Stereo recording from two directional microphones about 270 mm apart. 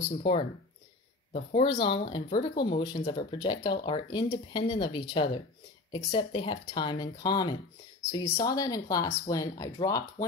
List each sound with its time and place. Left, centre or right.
0.2 s speech: left